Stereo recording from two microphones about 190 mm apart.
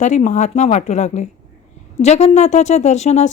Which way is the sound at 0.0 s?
40° left (ahead or behind).